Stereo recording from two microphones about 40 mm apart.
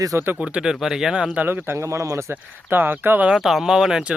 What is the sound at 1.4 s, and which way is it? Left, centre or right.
Speech, right.